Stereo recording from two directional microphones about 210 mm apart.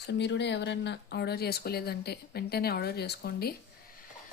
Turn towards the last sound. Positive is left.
turn(degrees=45)  # may be behind; listen again after turning